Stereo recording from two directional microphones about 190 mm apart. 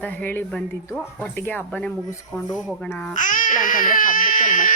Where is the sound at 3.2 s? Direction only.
45° left (ahead or behind).